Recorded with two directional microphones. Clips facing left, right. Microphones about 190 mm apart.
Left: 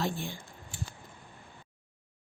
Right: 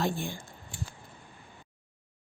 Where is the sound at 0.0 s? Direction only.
50° right (ahead or behind).